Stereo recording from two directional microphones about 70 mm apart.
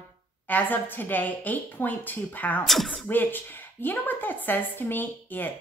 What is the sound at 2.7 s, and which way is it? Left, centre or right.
Speech, centre.